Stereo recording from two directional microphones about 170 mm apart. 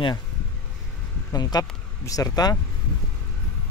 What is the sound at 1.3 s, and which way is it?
Speech, 25° left (ahead or behind).